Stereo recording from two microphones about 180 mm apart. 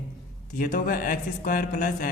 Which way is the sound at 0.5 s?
50° left (ahead or behind).